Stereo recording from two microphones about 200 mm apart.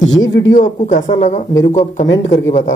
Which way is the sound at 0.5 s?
35° left (ahead or behind).